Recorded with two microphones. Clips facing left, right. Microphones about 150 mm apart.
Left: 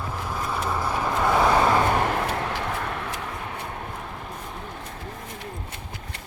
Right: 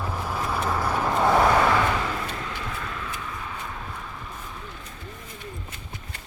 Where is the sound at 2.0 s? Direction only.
65° left (ahead or behind).